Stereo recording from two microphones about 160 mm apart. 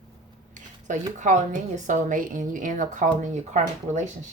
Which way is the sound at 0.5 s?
50° right (ahead or behind).